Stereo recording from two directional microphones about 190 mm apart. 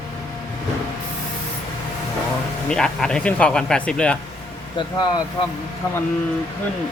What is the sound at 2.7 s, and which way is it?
Speech, 5° left (ahead or behind).